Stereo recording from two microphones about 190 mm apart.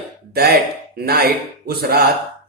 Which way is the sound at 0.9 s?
55° right (ahead or behind).